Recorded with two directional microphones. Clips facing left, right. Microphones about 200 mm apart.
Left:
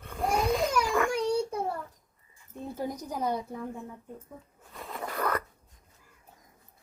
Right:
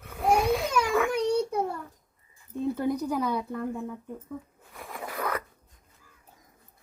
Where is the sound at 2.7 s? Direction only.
65° right (ahead or behind).